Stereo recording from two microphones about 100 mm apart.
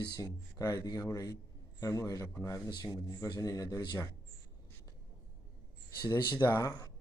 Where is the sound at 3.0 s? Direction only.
40° left (ahead or behind).